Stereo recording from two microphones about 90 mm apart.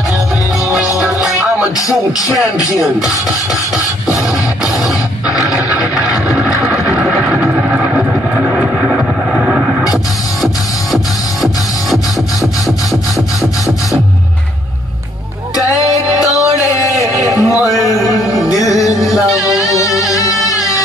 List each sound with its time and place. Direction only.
0.7 s music: 5° right (ahead or behind)
2.6 s music: 40° left (ahead or behind)
5.7 s vehicle: 5° right (ahead or behind)
8.5 s vehicle: 10° right (ahead or behind)
16.3 s music: 35° left (ahead or behind)
17.4 s a sound: 40° left (ahead or behind)
18.3 s music: centre (ahead or behind)
19.6 s music: 40° left (ahead or behind)